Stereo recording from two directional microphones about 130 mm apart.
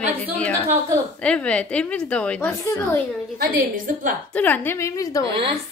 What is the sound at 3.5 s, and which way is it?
Speech, 90° right.